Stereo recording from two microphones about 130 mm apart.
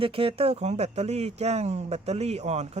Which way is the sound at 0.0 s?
45° right (ahead or behind).